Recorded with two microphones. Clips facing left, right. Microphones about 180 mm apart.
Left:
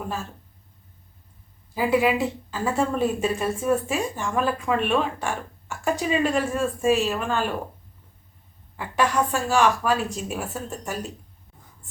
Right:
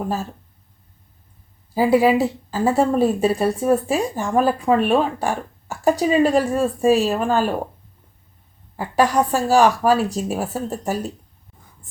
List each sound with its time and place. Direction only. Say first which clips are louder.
1.7 s speech: right 6 dB; 35° right (ahead or behind)
8.7 s speech: right 5 dB; 35° right (ahead or behind)